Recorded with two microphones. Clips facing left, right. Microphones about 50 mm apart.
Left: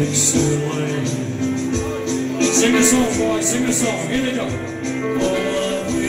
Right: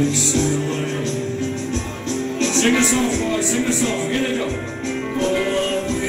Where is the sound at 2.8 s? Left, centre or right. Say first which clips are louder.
Left 3 dB; left.